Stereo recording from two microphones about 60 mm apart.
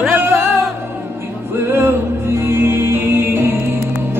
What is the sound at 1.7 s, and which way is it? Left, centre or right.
Music, right.